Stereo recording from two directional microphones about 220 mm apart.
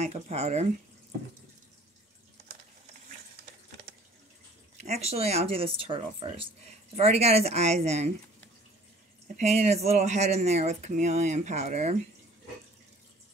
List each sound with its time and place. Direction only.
0.0 s speech: 30° right (ahead or behind)
4.7 s speech: 30° right (ahead or behind)
9.4 s speech: 30° right (ahead or behind)